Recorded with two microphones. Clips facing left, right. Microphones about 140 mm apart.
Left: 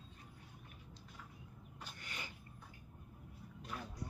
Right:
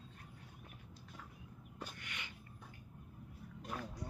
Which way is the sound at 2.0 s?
35° left (ahead or behind).